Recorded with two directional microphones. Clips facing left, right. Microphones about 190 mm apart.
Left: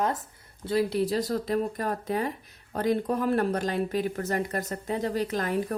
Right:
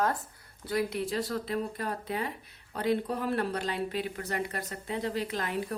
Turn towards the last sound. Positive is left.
turn(degrees=45)  # may be behind; listen again after turning